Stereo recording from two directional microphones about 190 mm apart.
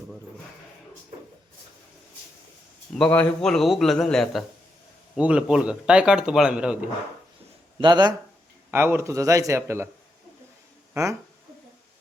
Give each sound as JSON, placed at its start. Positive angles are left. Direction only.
{"t": 2.9, "sound": "speech", "side_deg": 5}
{"t": 7.8, "sound": "speech", "side_deg": -20}
{"t": 8.7, "sound": "a man's voice", "side_deg": -10}
{"t": 10.9, "sound": "a man's voice", "side_deg": -15}